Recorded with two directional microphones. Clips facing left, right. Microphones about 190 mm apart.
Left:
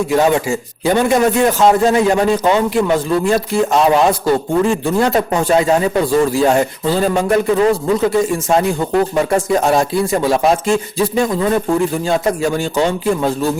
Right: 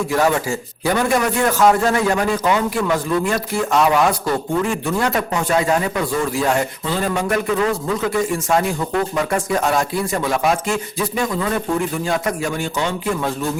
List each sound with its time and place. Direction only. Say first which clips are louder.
0.1 s a man's voice: left 4 dB; 20° left (ahead or behind)